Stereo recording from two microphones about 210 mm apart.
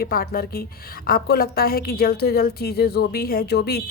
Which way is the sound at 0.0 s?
45° left (ahead or behind).